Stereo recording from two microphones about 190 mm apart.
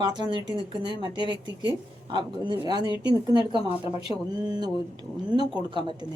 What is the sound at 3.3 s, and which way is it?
A woman's voice, 25° right (ahead or behind).